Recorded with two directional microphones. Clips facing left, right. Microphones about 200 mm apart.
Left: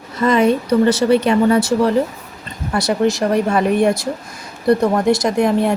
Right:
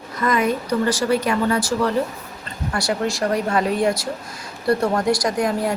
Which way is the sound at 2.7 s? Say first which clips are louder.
Left 6 dB; 20° left (ahead or behind).